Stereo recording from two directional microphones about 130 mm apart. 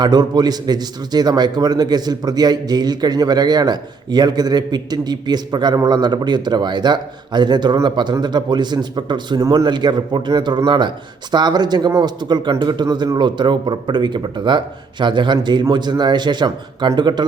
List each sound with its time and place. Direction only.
0.0 s a man's voice: 35° right (ahead or behind)